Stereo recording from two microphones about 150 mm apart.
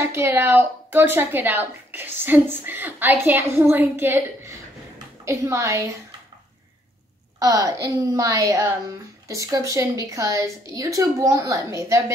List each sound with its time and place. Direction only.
0.0 s a woman's voice: 15° right (ahead or behind)
7.3 s a woman's voice: 20° right (ahead or behind)